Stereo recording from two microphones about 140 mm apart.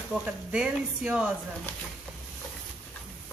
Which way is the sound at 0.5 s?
10° right (ahead or behind).